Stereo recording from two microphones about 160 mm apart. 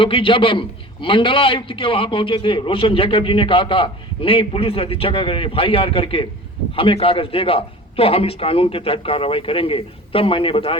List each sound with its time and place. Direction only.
0.0 s a man's voice: 35° left (ahead or behind)